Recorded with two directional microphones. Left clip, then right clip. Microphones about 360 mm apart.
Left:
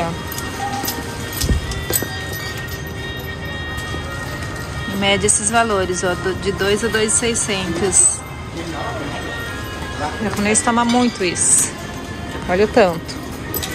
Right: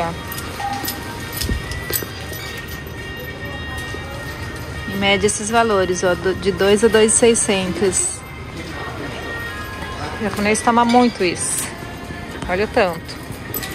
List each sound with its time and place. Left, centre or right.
5.0 s speech: centre
10.4 s speech: centre
12.4 s speech: centre